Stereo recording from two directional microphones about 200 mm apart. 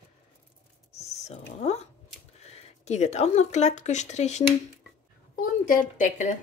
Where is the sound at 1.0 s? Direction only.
35° left (ahead or behind).